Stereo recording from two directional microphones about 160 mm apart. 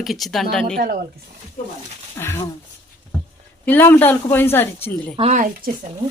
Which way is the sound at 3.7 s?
15° left (ahead or behind).